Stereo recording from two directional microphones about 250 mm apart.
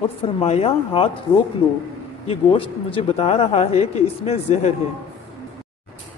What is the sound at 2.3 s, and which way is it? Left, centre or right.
Speech, left.